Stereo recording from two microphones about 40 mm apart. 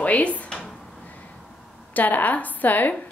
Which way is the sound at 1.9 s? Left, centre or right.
Left.